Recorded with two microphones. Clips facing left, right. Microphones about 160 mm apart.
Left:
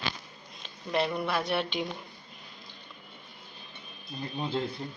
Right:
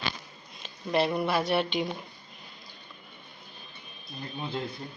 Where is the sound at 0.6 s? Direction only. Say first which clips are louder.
Right 3 dB; centre (ahead or behind).